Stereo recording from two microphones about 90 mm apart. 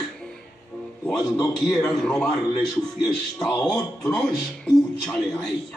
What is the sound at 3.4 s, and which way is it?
Speech, 5° left (ahead or behind).